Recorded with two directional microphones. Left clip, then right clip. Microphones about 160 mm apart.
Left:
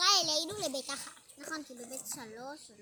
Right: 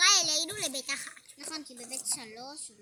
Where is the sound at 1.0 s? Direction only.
15° right (ahead or behind).